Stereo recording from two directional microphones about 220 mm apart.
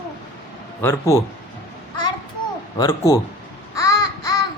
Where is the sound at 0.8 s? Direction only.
15° left (ahead or behind).